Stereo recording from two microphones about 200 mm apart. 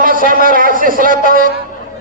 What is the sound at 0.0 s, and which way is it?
A man's voice, 45° right (ahead or behind).